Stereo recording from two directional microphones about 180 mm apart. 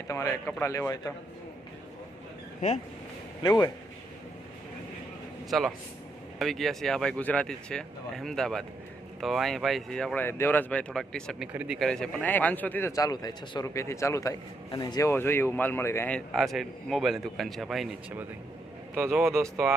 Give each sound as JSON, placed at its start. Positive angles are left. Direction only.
{"t": 0.1, "sound": "speech", "side_deg": 15}
{"t": 3.4, "sound": "a man's voice", "side_deg": 20}
{"t": 5.5, "sound": "speech", "side_deg": 0}
{"t": 18.9, "sound": "speech", "side_deg": -10}